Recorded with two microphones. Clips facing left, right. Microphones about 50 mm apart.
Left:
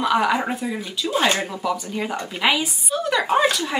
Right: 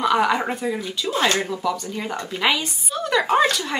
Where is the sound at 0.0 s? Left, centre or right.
Centre.